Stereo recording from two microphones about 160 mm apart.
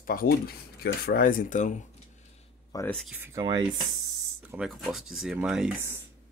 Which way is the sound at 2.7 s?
20° left (ahead or behind).